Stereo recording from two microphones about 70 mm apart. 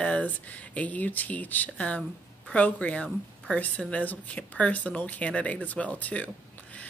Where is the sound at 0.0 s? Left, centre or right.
Centre.